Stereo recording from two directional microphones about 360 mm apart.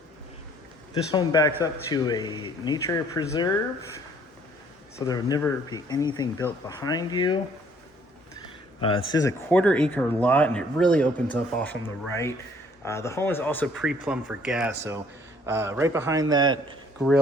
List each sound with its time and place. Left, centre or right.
1.1 s speech: centre
4.9 s speech: centre
9.1 s a man's voice: centre